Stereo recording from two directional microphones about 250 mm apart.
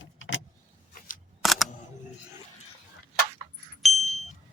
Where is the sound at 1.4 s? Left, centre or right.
Centre.